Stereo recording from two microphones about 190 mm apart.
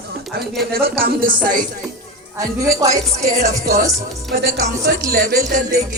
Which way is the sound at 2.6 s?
15° right (ahead or behind).